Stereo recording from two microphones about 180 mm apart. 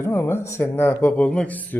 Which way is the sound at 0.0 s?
10° left (ahead or behind).